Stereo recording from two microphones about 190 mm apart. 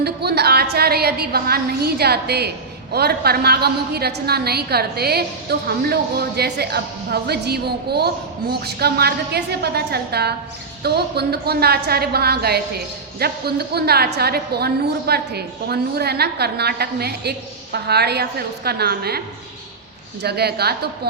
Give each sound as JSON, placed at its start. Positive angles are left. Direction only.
{"t": 0.0, "sound": "a woman's voice", "side_deg": -60}
{"t": 20.2, "sound": "a woman's voice", "side_deg": -60}